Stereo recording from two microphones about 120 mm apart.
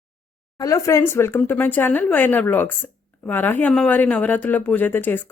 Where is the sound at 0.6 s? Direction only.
25° left (ahead or behind).